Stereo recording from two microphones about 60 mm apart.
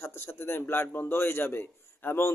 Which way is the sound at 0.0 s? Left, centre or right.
Left.